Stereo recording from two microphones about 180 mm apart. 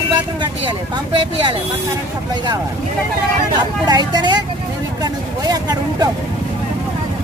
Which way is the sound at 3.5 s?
25° right (ahead or behind).